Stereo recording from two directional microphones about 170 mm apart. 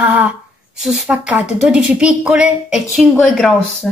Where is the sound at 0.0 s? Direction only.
10° right (ahead or behind).